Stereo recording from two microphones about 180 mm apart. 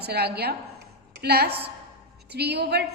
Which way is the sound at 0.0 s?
65° right (ahead or behind).